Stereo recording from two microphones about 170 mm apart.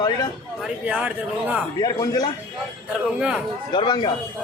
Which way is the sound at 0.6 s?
5° right (ahead or behind).